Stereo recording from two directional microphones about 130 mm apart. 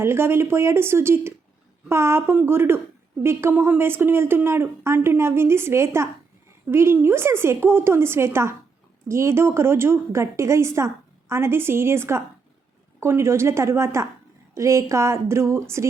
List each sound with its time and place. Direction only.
0.0 s a woman's voice: 20° right (ahead or behind)